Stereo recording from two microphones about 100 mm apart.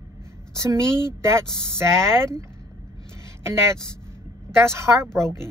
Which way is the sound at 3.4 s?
25° right (ahead or behind).